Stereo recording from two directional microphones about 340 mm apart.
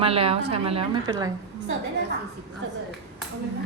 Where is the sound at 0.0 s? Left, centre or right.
Centre.